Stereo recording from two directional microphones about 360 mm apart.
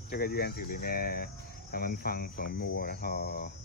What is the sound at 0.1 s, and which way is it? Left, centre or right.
Speech, left.